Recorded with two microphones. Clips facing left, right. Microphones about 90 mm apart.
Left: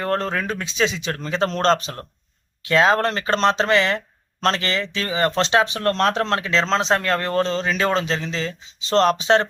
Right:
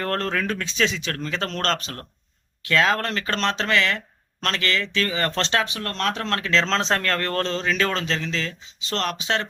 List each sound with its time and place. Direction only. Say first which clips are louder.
0.0 s speech: left 2 dB; 10° left (ahead or behind)
5.6 s speech: left 7 dB; 35° left (ahead or behind)
6.4 s speech: left 2 dB; 10° left (ahead or behind); by 9.5 s 30° left (ahead or behind)